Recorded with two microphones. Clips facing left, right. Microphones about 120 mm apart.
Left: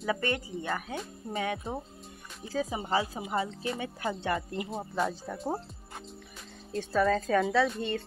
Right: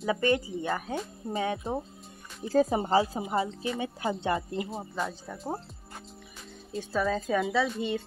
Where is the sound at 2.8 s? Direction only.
30° right (ahead or behind).